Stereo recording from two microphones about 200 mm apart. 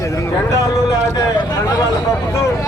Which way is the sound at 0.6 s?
20° left (ahead or behind).